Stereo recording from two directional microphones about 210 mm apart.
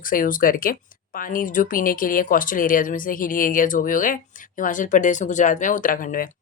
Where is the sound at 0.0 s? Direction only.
40° left (ahead or behind).